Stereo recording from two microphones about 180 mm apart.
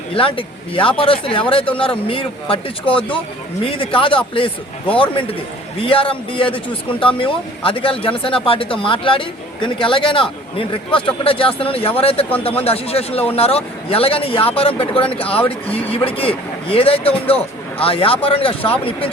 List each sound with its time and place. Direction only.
0.1 s a man's voice: 30° left (ahead or behind)